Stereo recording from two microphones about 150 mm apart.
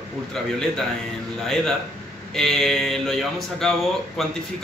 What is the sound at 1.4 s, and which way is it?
A man's voice, centre (ahead or behind).